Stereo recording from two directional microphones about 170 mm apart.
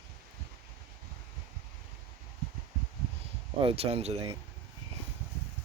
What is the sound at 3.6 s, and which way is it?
Speech, 35° right (ahead or behind).